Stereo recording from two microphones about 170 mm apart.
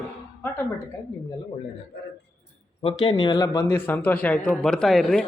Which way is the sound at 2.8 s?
30° left (ahead or behind).